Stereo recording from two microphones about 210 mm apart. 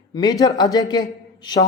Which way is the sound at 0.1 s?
20° left (ahead or behind).